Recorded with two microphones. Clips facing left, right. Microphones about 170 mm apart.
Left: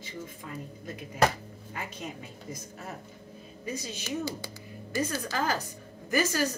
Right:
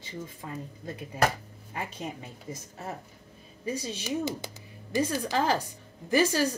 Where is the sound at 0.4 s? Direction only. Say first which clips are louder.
Right 3 dB; 30° right (ahead or behind).